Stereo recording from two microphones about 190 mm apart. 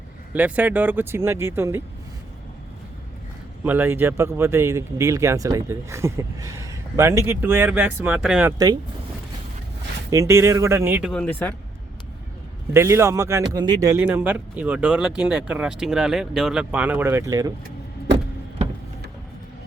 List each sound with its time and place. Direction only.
0.3 s speech: 10° right (ahead or behind)
3.6 s speech: 10° right (ahead or behind)
8.5 s speech: 20° right (ahead or behind)
10.1 s speech: 15° right (ahead or behind)
11.1 s speech: 5° left (ahead or behind)
12.7 s speech: 15° right (ahead or behind)
14.0 s speech: 5° right (ahead or behind)